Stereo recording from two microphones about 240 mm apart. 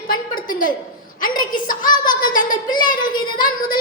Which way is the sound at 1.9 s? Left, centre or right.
Centre.